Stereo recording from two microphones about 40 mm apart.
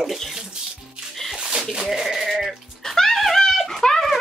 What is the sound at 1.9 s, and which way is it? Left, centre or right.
Sheep, centre.